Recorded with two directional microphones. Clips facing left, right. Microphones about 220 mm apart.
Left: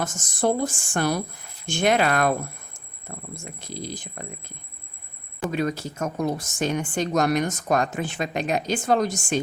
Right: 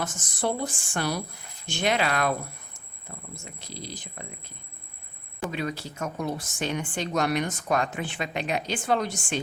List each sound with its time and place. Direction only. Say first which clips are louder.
0.0 s speech: left 5 dB; 45° left (ahead or behind)
3.3 s speech: left 7 dB; 50° left (ahead or behind)